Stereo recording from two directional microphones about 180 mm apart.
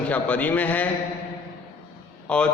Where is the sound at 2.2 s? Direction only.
5° left (ahead or behind).